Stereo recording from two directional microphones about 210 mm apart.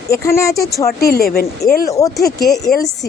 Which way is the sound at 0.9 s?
45° left (ahead or behind).